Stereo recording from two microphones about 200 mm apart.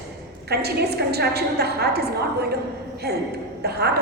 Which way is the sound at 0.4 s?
55° right (ahead or behind).